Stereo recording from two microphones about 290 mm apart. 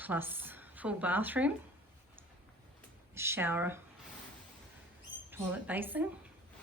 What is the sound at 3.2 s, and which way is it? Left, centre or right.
Speech, centre.